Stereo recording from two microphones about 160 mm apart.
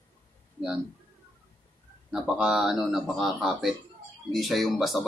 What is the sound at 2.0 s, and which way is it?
Speech, 5° right (ahead or behind).